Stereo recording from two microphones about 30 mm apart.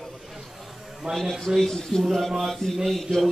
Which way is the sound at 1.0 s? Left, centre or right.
Centre.